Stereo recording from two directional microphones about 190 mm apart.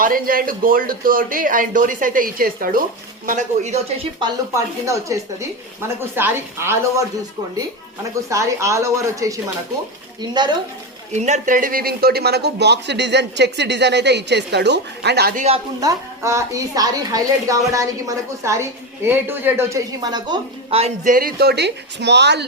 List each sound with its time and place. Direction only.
0.0 s speech: 50° right (ahead or behind)
4.2 s speech: 15° right (ahead or behind)
8.1 s a woman's voice: 15° right (ahead or behind)
11.1 s a man's voice: 40° right (ahead or behind)
15.8 s a woman's voice: 15° right (ahead or behind); by 22.4 s 65° right (ahead or behind)